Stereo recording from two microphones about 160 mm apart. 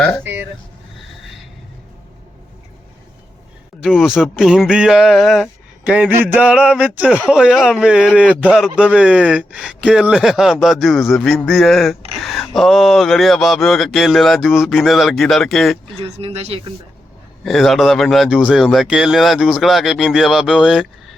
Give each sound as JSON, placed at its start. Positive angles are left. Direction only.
{"t": 3.8, "sound": "speech", "side_deg": 0}
{"t": 6.3, "sound": "a sound", "side_deg": -5}
{"t": 7.0, "sound": "speech", "side_deg": -5}
{"t": 16.0, "sound": "speech", "side_deg": -40}
{"t": 17.4, "sound": "speech", "side_deg": 0}